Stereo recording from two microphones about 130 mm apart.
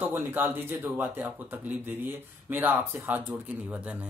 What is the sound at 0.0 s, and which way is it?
Speech, 15° right (ahead or behind).